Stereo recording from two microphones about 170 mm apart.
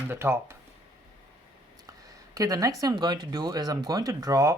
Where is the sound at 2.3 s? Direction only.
20° right (ahead or behind).